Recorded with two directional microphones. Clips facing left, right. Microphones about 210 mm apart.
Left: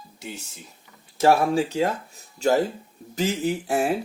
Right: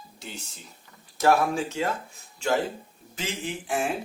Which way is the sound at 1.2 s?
30° left (ahead or behind).